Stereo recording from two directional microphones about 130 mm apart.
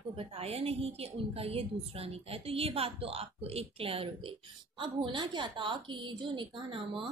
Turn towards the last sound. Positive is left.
turn(degrees=-40)  # may be behind; listen again after turning